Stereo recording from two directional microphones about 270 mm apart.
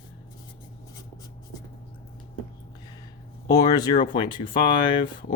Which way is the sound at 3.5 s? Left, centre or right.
Centre.